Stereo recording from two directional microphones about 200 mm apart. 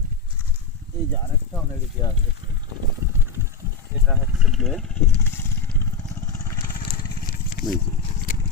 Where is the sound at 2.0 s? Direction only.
20° left (ahead or behind).